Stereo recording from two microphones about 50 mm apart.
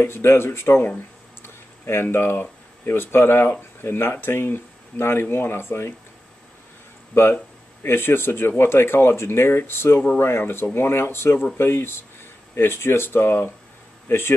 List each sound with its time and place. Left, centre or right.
0.0 s speech: left
1.4 s a sound: left
2.8 s speech: left
7.8 s speech: left